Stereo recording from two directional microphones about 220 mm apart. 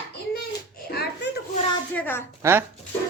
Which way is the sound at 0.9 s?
45° left (ahead or behind).